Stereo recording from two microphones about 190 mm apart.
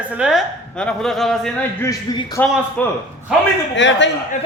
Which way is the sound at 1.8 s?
20° left (ahead or behind).